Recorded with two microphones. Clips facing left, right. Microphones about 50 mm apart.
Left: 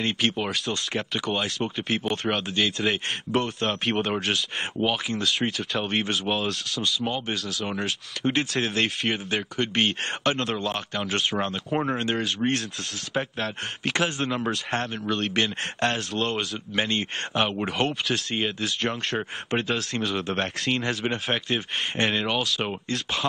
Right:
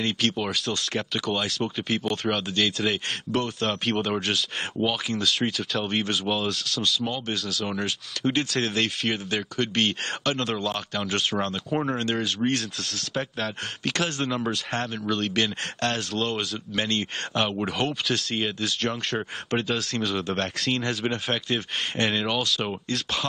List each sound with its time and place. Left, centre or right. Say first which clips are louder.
0.0 s speech: even; centre
1.5 s speech: even; centre
2.0 s speech: even; centre
16.7 s speech: left 1 dB; centre